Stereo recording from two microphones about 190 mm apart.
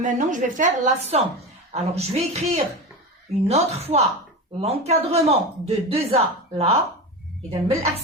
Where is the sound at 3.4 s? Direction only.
35° right (ahead or behind).